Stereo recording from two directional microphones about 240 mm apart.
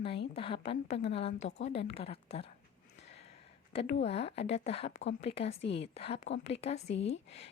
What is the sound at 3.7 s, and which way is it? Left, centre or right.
A woman's voice, left.